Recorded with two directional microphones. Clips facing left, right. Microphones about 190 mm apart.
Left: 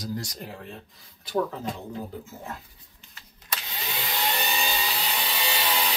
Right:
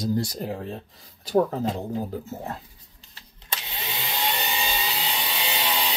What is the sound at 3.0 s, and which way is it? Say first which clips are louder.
Vacuum cleaner: even; 30° right (ahead or behind).